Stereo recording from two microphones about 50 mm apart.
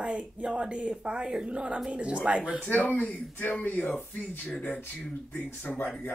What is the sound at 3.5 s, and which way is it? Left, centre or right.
Speech, left.